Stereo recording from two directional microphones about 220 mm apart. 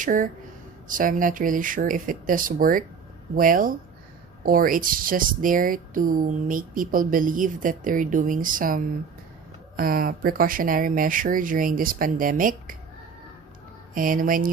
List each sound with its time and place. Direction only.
0.0 s speech: 35° right (ahead or behind)
13.9 s speech: 40° right (ahead or behind)